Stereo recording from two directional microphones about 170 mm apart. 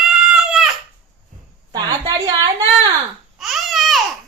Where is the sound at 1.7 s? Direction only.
25° right (ahead or behind).